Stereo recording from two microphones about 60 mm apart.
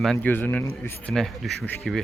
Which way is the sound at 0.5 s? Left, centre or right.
Left.